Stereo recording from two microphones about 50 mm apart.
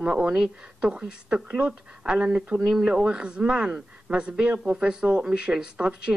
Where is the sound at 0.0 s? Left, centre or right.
Right.